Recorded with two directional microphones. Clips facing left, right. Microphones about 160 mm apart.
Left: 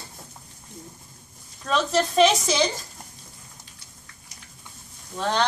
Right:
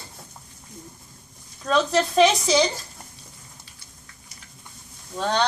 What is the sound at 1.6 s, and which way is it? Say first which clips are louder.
Speech: right 2 dB; centre (ahead or behind).